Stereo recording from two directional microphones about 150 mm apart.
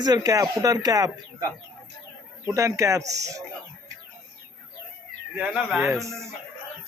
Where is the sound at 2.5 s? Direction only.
20° right (ahead or behind).